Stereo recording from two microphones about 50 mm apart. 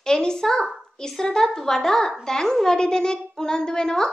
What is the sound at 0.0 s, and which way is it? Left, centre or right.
A woman's voice, centre.